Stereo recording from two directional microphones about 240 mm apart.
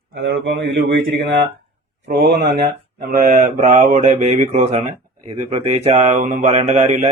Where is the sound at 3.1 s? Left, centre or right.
Right.